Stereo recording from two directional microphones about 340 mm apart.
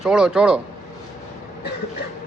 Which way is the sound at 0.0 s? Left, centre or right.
Centre.